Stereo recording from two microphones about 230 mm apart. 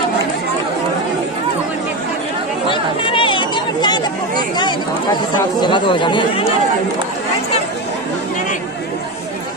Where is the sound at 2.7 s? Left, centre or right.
Left.